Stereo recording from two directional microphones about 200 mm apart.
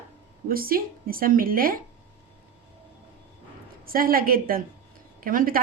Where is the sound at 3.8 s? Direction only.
45° right (ahead or behind).